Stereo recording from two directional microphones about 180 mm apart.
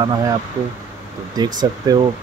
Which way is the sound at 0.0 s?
20° right (ahead or behind).